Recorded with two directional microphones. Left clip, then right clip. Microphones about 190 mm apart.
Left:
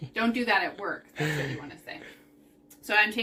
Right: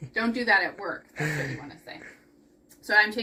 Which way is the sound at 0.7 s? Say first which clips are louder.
Even; centre (ahead or behind).